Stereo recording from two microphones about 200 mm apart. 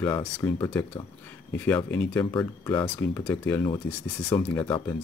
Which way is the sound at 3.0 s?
5° left (ahead or behind).